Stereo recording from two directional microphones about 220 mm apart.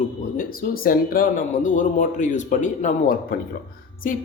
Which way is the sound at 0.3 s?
40° left (ahead or behind).